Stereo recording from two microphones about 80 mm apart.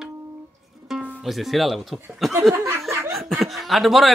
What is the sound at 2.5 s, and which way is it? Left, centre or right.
Snicker, right.